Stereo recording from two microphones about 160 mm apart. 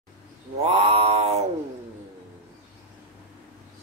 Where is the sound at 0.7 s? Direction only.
40° right (ahead or behind).